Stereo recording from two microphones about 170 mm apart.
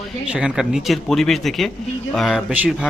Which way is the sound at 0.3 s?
5° right (ahead or behind).